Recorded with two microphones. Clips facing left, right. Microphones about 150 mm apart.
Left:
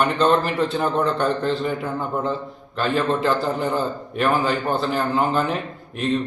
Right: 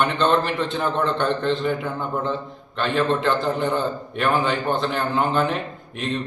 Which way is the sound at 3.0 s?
5° left (ahead or behind).